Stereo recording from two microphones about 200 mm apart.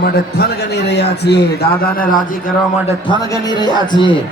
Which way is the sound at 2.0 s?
45° left (ahead or behind).